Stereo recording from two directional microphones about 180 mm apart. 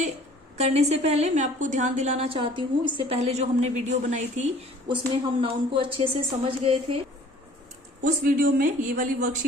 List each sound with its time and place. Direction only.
0.6 s a woman's voice: 35° right (ahead or behind)
8.0 s speech: 50° right (ahead or behind)